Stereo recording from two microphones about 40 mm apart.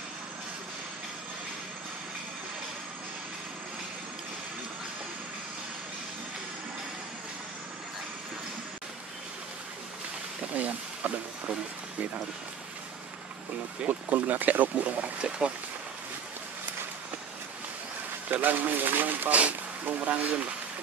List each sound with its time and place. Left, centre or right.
10.5 s a sound: right
13.8 s speech: right
15.2 s speech: right
18.3 s speech: right